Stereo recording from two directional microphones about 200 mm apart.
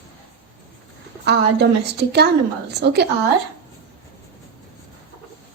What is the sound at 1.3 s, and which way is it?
A woman's voice, 55° right (ahead or behind).